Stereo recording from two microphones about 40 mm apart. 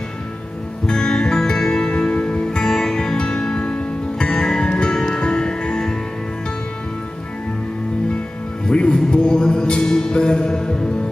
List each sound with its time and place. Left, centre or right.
0.8 s music: centre
1.9 s music: left
8.6 s music: left